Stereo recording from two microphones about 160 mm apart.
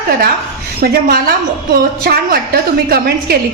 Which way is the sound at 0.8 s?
70° right (ahead or behind).